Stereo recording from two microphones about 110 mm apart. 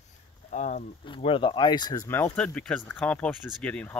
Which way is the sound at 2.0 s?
20° left (ahead or behind).